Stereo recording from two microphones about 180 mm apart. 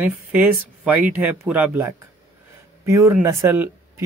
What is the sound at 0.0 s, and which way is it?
Speech, 10° right (ahead or behind).